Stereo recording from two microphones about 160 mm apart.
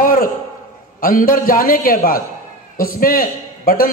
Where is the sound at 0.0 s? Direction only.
60° left (ahead or behind).